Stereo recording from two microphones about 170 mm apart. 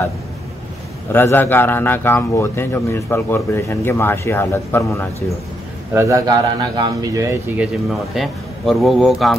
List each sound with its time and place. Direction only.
1.1 s a man's voice: 10° left (ahead or behind)
5.9 s a man's voice: 20° right (ahead or behind); by 9.4 s centre (ahead or behind)